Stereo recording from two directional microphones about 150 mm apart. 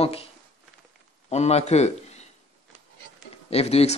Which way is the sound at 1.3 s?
45° left (ahead or behind).